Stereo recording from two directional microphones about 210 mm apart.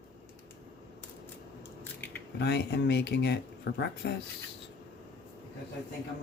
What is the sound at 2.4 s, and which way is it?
Speech, 50° left (ahead or behind).